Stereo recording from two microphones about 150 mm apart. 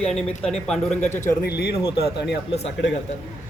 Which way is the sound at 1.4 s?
90° left.